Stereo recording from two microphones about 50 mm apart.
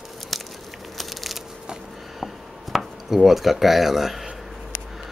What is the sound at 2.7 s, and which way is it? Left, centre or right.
Speech, centre.